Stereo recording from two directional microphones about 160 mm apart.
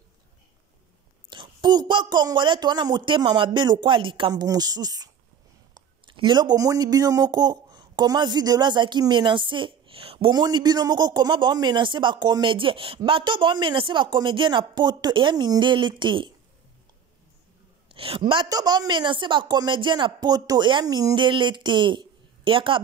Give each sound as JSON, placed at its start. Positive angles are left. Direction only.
{"t": 1.3, "sound": "speech", "side_deg": -30}
{"t": 17.8, "sound": "a sound", "side_deg": -35}
{"t": 18.3, "sound": "speech", "side_deg": -25}